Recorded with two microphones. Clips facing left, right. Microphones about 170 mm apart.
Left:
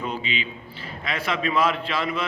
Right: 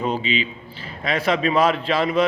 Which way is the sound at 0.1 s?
35° right (ahead or behind).